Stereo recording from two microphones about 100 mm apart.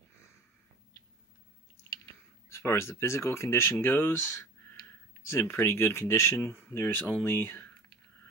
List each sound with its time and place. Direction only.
2.5 s speech: 25° left (ahead or behind)
5.3 s speech: 25° left (ahead or behind)